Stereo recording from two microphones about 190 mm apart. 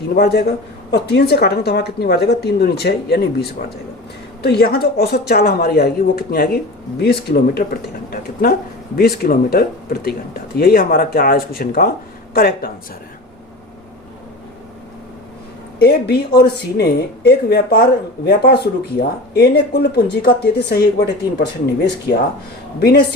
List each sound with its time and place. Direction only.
0.2 s speech: 55° left (ahead or behind)
15.8 s speech: 55° left (ahead or behind)